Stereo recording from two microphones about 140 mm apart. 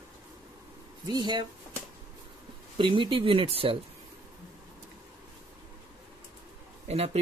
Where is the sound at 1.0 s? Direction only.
30° right (ahead or behind).